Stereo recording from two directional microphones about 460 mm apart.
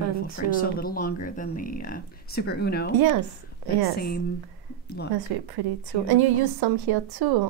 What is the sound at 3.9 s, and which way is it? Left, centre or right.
Speech, centre.